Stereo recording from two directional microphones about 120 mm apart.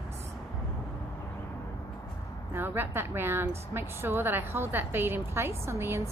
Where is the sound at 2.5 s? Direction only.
20° right (ahead or behind).